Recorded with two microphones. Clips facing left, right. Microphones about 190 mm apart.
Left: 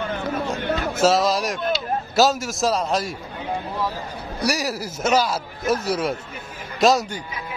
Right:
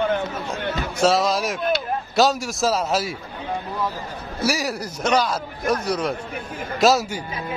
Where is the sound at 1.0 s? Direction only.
Centre (ahead or behind).